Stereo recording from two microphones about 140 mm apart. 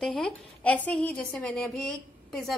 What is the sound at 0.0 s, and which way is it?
Speech, 5° left (ahead or behind).